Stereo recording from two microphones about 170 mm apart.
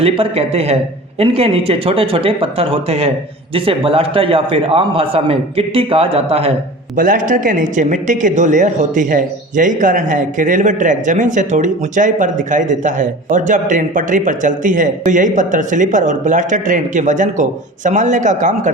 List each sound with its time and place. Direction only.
0.0 s a man's voice: 35° right (ahead or behind)
6.9 s a woman's voice: 50° right (ahead or behind)